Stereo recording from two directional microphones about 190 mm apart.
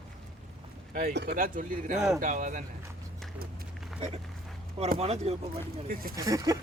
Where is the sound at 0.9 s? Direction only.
50° right (ahead or behind).